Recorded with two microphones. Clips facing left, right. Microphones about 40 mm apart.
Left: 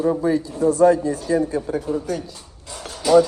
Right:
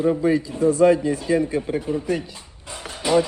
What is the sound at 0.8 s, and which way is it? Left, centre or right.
Speech, right.